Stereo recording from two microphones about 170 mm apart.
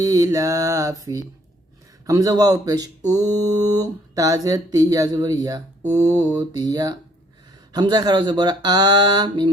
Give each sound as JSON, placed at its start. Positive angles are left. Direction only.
{"t": 0.0, "sound": "speech", "side_deg": -20}